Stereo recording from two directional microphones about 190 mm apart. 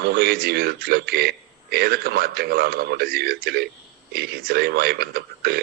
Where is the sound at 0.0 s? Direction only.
55° right (ahead or behind).